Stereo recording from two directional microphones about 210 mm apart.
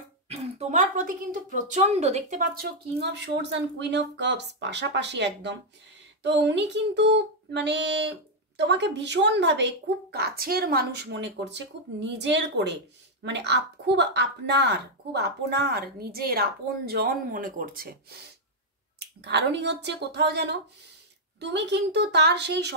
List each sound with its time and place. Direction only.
0.3 s a woman's voice: 30° right (ahead or behind)
18.9 s a woman's voice: 55° right (ahead or behind)